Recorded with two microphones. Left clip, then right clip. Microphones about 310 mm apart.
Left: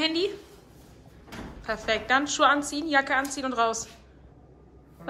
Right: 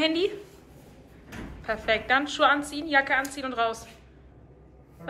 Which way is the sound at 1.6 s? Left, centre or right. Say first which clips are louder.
Right 1 dB; centre.